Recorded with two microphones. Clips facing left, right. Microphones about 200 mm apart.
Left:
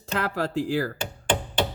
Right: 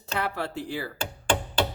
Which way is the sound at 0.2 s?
90° left.